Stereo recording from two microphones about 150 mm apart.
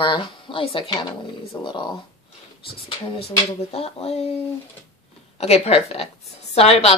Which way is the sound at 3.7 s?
40° left (ahead or behind).